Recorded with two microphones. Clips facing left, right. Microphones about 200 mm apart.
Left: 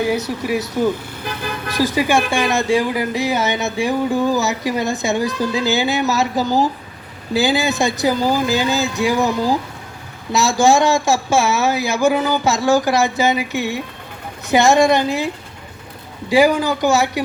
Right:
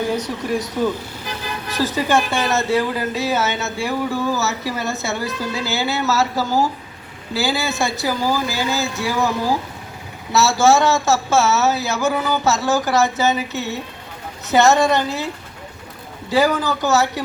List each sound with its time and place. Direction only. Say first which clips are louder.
0.0 s speech: left 2 dB; 10° left (ahead or behind)
16.3 s speech: left 3 dB; 15° left (ahead or behind)